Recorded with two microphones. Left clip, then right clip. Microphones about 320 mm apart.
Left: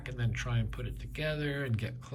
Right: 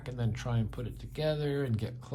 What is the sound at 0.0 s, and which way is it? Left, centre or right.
Speech, centre.